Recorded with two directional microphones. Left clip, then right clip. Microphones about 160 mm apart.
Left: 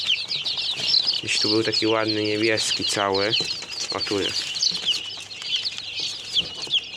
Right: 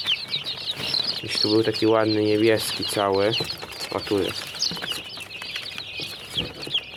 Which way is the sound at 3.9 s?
15° right (ahead or behind).